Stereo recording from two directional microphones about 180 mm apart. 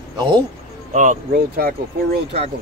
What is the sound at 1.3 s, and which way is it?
Speech, 55° right (ahead or behind).